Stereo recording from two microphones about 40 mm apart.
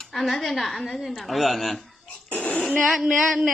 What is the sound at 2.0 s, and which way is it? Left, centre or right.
Cough, left.